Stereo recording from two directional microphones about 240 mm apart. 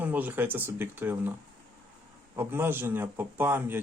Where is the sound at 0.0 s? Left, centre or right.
Centre.